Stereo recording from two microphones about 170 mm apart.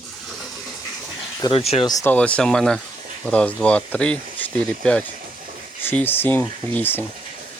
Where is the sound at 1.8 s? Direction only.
20° left (ahead or behind).